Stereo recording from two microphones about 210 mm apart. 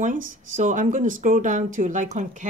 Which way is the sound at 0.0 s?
40° right (ahead or behind).